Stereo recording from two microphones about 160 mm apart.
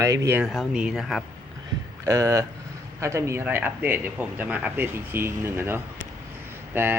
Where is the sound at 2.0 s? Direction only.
20° right (ahead or behind).